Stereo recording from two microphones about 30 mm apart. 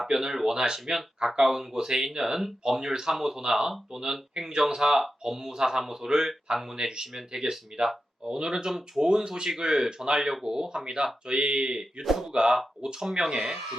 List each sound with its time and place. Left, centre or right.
0.1 s speech: right
6.7 s speech: right
7.7 s speech: centre
12.0 s speech: centre
12.3 s speech: right
12.8 s speech: centre